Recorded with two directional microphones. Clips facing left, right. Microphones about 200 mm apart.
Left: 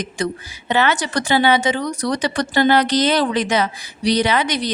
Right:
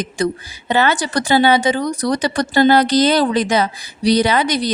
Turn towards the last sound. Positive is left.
turn(degrees=-35)  # may be behind; listen again after turning